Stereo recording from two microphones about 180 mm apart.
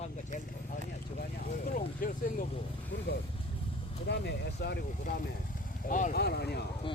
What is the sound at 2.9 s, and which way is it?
Speech, 70° left (ahead or behind).